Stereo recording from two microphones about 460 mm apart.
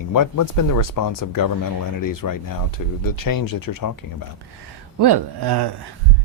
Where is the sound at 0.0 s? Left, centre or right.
Left.